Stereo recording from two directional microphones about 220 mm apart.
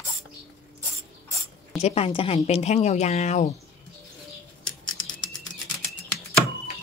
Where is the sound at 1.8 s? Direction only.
30° left (ahead or behind).